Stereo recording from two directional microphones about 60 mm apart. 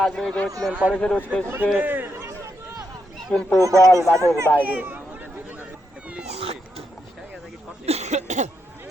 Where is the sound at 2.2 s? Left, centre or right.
Right.